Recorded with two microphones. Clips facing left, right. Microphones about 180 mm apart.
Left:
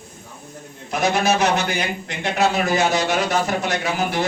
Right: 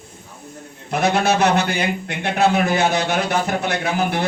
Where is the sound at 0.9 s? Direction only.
60° right (ahead or behind).